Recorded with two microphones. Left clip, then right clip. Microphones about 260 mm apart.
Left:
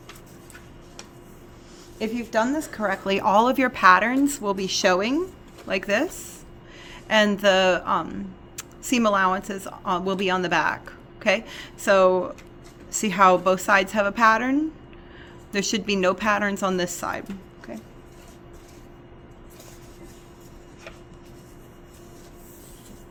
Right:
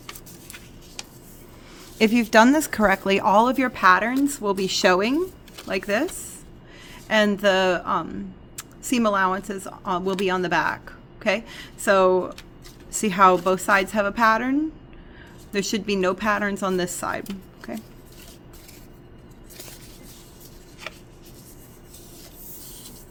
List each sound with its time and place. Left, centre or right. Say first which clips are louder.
2.0 s speech: right 8 dB; right